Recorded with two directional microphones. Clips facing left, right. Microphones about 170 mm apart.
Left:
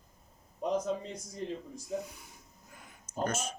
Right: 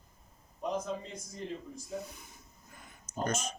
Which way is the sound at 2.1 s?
10° left (ahead or behind).